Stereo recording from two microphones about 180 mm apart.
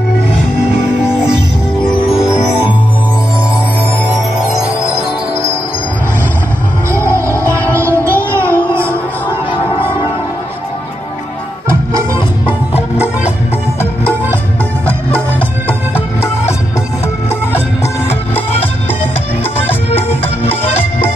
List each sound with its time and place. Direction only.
1.8 s music: 25° left (ahead or behind)
6.9 s music: 15° right (ahead or behind)
9.5 s music: 25° left (ahead or behind)
12.7 s music: 10° right (ahead or behind)
20.0 s music: 10° left (ahead or behind)